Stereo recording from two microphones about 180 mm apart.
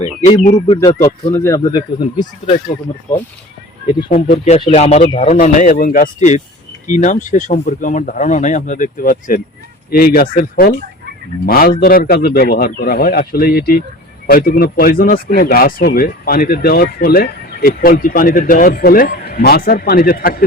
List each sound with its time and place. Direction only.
0.4 s speech: 35° left (ahead or behind)
0.8 s speech: 20° left (ahead or behind)
4.1 s speech: 35° left (ahead or behind); by 20.4 s 55° left (ahead or behind)